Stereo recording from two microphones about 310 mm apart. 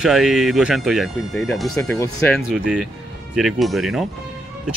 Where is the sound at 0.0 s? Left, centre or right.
Centre.